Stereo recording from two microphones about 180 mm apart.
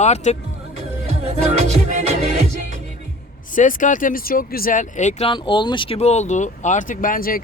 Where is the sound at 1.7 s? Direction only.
35° right (ahead or behind).